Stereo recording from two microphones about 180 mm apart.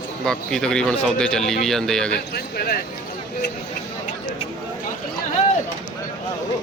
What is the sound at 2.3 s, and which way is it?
Speech, 60° left (ahead or behind).